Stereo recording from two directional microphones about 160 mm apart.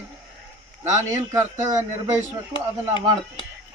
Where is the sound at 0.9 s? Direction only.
20° right (ahead or behind).